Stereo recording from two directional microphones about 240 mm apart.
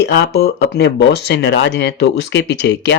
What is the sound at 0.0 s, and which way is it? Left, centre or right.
Speech, left.